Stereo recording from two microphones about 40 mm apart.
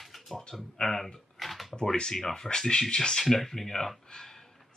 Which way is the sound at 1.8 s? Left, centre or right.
Centre.